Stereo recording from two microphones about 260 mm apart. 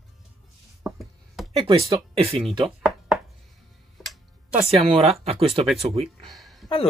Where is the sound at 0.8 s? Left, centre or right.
Centre.